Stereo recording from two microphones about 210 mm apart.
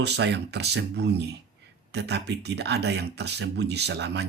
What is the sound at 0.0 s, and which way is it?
Speech, 55° right (ahead or behind).